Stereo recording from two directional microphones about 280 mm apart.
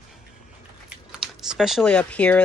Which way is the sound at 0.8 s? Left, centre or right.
Centre.